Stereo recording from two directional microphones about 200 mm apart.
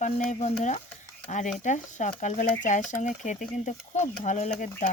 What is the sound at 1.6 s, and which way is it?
Speech, 40° left (ahead or behind).